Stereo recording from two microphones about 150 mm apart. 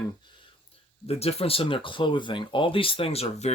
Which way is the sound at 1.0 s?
40° left (ahead or behind).